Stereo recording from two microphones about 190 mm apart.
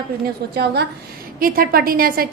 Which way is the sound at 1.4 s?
50° right (ahead or behind).